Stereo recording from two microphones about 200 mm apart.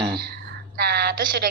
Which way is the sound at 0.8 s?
50° right (ahead or behind).